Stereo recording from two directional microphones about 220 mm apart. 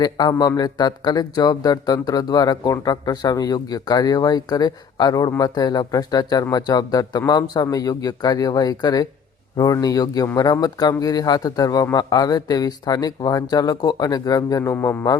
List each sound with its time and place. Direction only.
0.0 s speech: 20° left (ahead or behind)